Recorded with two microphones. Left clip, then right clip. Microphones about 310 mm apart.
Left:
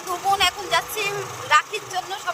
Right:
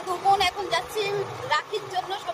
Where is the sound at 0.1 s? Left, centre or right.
Centre.